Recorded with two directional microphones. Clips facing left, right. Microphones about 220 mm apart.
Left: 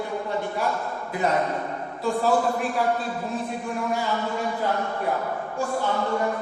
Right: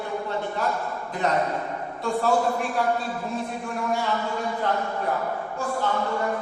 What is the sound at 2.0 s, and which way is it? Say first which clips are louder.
Speech: left 1 dB; centre (ahead or behind).